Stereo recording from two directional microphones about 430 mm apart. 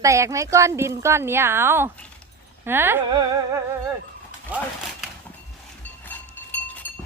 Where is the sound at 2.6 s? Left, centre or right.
Centre.